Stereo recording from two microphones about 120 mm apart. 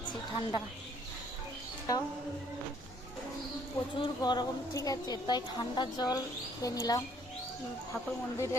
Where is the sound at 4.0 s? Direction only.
35° left (ahead or behind).